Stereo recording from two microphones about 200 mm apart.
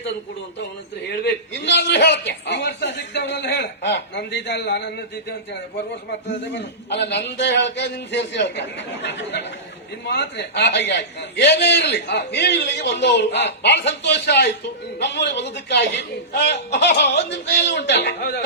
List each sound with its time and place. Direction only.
1.2 s a man's voice: 60° left (ahead or behind)
6.1 s a man's voice: 60° left (ahead or behind)